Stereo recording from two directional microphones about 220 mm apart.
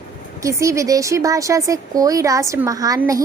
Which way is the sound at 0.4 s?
15° right (ahead or behind).